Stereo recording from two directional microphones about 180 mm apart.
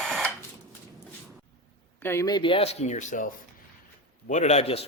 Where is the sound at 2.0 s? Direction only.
15° left (ahead or behind); by 3.3 s 45° left (ahead or behind).